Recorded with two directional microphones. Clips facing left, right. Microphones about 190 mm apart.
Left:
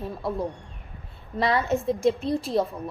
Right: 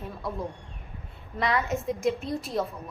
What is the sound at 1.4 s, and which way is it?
A woman's voice, 30° left (ahead or behind).